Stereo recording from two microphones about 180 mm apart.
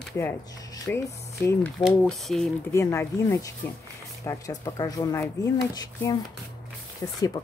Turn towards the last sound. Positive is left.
turn(degrees=25)  # may be behind; listen again after turning